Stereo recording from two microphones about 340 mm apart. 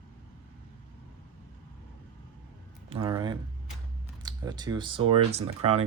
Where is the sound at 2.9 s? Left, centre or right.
Centre.